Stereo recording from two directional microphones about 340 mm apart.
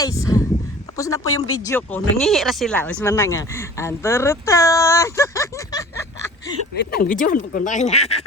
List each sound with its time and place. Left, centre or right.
0.0 s a sound: centre
0.9 s speech: centre
6.7 s speech: left